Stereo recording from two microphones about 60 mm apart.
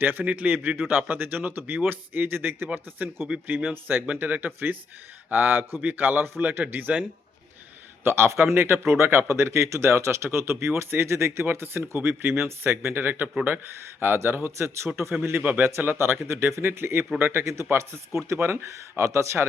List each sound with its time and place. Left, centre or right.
0.0 s a man's voice: right
2.6 s a man's voice: right
8.0 s a man's voice: right
17.7 s speech: right